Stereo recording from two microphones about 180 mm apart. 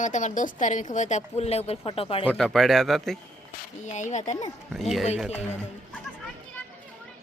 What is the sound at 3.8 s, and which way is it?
Speech, 40° left (ahead or behind).